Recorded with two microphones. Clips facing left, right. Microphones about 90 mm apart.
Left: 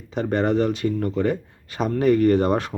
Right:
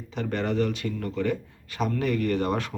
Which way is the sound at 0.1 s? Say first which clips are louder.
Left 7 dB; 30° left (ahead or behind).